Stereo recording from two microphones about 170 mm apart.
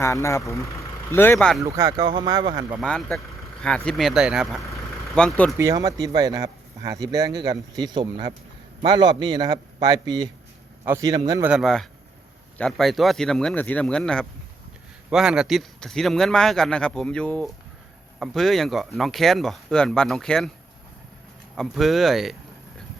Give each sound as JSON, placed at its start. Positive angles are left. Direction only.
{"t": 0.0, "sound": "speech", "side_deg": 15}
{"t": 1.6, "sound": "speech", "side_deg": -15}
{"t": 2.0, "sound": "speech", "side_deg": -30}
{"t": 2.8, "sound": "speech", "side_deg": 5}
{"t": 5.5, "sound": "speech", "side_deg": -20}
{"t": 11.4, "sound": "speech", "side_deg": 0}
{"t": 21.5, "sound": "speech", "side_deg": 0}